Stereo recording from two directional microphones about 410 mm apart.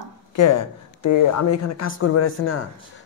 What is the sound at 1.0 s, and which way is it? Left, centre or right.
Speech, left.